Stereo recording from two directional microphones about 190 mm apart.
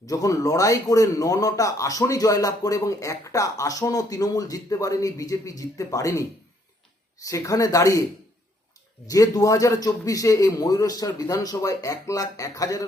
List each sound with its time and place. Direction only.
0.0 s a man's voice: 20° left (ahead or behind)
7.3 s a man's voice: 15° left (ahead or behind)
9.0 s a man's voice: 20° left (ahead or behind)